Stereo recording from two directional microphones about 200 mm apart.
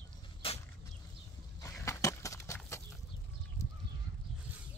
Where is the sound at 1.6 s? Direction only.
15° left (ahead or behind).